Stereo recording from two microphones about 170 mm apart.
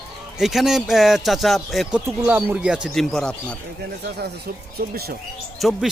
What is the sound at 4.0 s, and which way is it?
Speech, 70° right (ahead or behind).